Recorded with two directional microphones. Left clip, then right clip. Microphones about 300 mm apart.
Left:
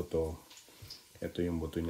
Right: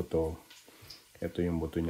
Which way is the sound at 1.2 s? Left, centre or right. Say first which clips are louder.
Right 3 dB; centre.